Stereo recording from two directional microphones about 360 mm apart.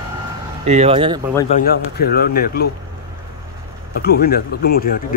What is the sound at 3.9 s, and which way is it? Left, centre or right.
A man's voice, left.